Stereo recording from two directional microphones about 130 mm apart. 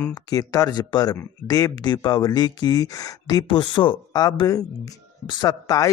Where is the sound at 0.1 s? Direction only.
30° left (ahead or behind).